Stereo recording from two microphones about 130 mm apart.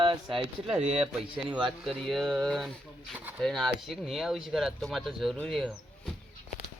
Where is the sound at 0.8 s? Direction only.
50° right (ahead or behind).